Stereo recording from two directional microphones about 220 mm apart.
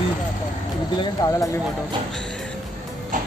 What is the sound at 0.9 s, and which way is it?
Speech, 15° left (ahead or behind).